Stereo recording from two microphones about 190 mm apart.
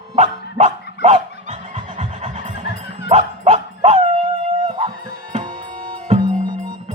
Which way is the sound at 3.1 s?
35° right (ahead or behind).